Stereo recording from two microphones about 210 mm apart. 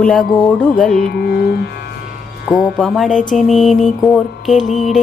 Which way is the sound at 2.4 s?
Centre (ahead or behind).